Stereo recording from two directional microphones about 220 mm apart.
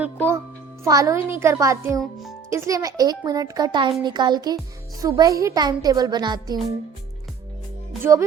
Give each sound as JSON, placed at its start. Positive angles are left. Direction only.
{"t": 0.0, "sound": "a child's voice", "side_deg": -10}